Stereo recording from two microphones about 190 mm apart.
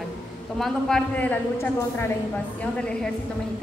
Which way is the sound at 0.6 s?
5° left (ahead or behind).